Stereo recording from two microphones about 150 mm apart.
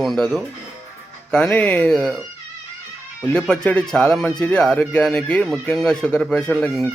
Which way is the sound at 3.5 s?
5° left (ahead or behind).